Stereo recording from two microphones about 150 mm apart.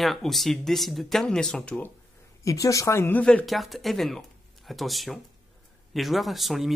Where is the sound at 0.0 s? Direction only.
Centre (ahead or behind).